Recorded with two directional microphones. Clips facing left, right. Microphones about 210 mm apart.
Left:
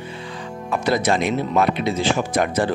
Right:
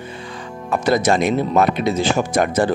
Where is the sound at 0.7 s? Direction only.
45° right (ahead or behind).